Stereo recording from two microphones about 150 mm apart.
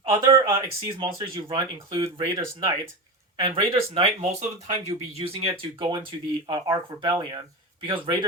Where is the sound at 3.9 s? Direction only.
50° right (ahead or behind).